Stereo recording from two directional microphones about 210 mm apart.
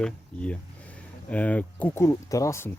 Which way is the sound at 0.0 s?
5° left (ahead or behind).